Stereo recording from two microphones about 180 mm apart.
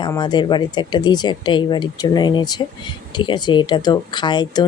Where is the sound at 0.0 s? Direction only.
25° left (ahead or behind).